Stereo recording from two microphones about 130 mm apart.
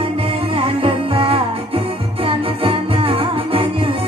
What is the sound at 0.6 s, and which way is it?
Music, 45° right (ahead or behind).